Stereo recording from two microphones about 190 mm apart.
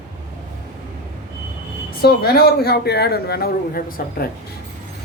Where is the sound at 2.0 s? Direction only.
55° left (ahead or behind).